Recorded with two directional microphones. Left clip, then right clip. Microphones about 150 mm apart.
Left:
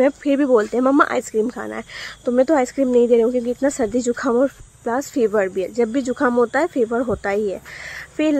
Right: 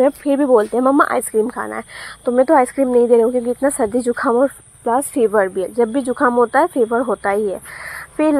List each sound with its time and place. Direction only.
0.0 s speech: 15° left (ahead or behind)
2.5 s speech: 25° left (ahead or behind)
3.0 s speech: 10° left (ahead or behind)
4.8 s speech: centre (ahead or behind)